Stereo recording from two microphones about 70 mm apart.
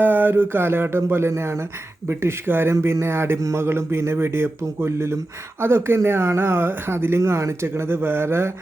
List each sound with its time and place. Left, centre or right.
0.0 s speech: right